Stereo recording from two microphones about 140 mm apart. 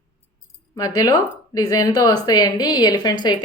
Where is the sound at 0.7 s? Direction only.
25° left (ahead or behind).